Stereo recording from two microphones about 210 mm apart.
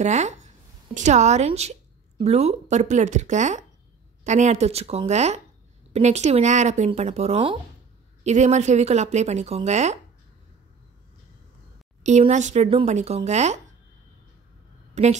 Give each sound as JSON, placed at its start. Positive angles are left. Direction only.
{"t": 0.0, "sound": "speech", "side_deg": -35}
{"t": 12.0, "sound": "speech", "side_deg": -35}
{"t": 15.0, "sound": "speech", "side_deg": -35}